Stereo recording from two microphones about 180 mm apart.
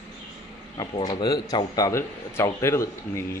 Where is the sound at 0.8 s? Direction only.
20° left (ahead or behind).